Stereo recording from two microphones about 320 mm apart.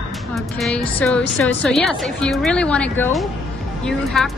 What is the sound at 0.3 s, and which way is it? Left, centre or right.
A woman's voice, centre.